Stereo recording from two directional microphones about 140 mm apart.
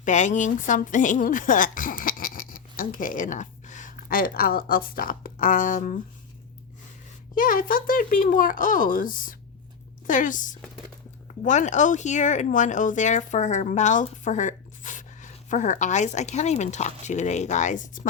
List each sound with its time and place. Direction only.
0.0 s a woman's voice: 60° left (ahead or behind)
7.3 s speech: 80° left
10.1 s a woman's voice: 70° left (ahead or behind)